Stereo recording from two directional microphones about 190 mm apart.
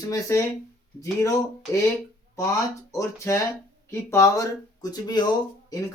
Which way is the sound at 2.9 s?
15° left (ahead or behind).